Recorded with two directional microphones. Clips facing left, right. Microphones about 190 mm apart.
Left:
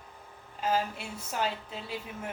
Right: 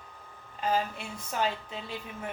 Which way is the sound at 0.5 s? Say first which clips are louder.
Even; 5° left (ahead or behind).